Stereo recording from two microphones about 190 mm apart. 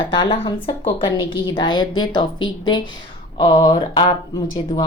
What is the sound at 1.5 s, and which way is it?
Speech, 25° left (ahead or behind).